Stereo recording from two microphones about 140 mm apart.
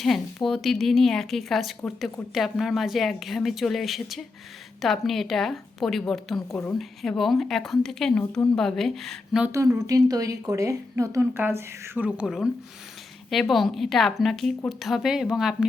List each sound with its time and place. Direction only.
0.0 s a woman's voice: centre (ahead or behind)
9.5 s a woman's voice: 20° right (ahead or behind); by 15.5 s 5° right (ahead or behind)